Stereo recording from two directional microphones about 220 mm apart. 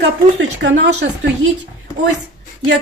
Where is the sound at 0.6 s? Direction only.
55° right (ahead or behind).